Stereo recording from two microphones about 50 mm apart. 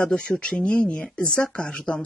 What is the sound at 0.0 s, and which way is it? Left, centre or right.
Speech, left.